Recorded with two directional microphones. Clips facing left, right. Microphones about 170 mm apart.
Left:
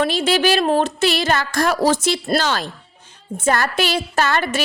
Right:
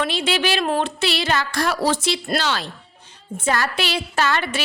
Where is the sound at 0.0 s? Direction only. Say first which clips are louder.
Left 4 dB; 40° left (ahead or behind).